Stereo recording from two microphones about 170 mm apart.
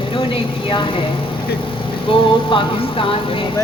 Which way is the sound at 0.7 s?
30° left (ahead or behind).